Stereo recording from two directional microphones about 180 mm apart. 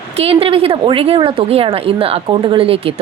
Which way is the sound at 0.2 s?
30° right (ahead or behind).